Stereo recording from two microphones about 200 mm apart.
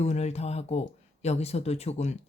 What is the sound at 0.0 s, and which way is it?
Speech, 35° left (ahead or behind).